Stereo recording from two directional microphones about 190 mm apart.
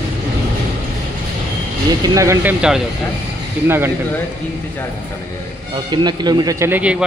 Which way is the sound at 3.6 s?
10° right (ahead or behind).